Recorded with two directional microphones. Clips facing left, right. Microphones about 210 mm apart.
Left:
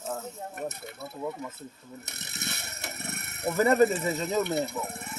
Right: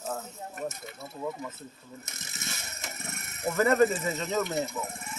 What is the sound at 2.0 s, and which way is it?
Ratchet, 65° left (ahead or behind).